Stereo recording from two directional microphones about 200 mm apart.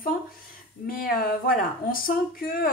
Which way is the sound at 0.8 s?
45° left (ahead or behind).